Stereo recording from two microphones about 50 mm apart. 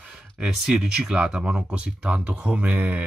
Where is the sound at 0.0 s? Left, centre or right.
Centre.